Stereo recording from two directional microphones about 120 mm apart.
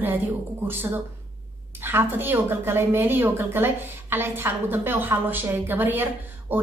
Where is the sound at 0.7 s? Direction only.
20° right (ahead or behind).